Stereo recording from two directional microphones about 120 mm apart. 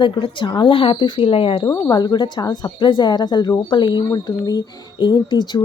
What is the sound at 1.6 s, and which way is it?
A woman's voice, 30° left (ahead or behind).